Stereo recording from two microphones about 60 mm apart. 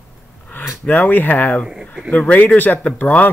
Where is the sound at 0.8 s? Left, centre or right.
Left.